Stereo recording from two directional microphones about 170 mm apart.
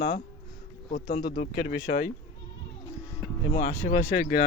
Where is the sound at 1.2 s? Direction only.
60° left (ahead or behind).